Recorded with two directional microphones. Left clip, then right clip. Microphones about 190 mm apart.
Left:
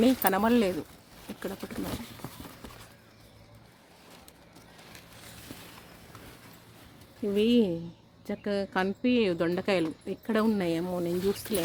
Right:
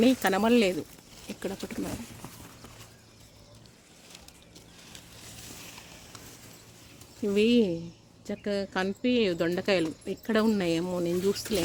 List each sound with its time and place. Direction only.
0.2 s speech: 10° right (ahead or behind)
2.2 s clip-clop: 55° left (ahead or behind)
7.3 s speech: 10° right (ahead or behind)